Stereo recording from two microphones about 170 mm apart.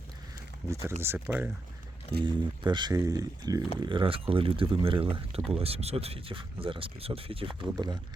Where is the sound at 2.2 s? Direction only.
25° right (ahead or behind).